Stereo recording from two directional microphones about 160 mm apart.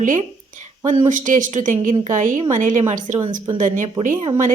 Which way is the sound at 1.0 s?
55° right (ahead or behind).